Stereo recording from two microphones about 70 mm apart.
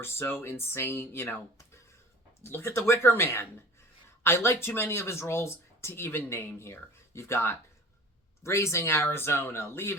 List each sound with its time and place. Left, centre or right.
0.0 s speech: left